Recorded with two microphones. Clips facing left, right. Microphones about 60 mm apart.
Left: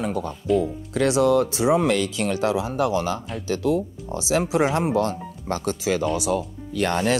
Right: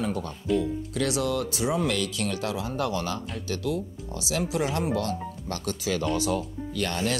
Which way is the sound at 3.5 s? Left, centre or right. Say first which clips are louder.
Left 8 dB; left.